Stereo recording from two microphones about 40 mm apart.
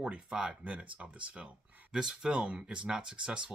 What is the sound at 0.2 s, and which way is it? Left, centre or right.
Speech, centre.